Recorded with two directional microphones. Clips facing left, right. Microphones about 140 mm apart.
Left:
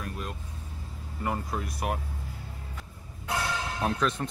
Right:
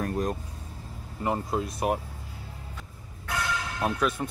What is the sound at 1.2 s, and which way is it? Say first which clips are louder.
Speech: right 4 dB; 25° right (ahead or behind).